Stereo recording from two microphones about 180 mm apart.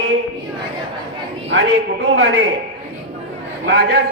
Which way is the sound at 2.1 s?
90° right.